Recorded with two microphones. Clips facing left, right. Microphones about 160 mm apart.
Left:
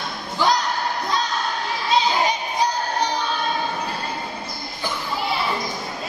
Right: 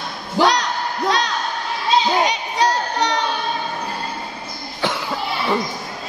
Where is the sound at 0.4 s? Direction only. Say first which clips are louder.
Right 3 dB; 80° right.